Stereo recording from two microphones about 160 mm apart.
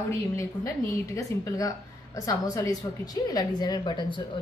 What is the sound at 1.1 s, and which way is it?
A woman's voice, 20° left (ahead or behind).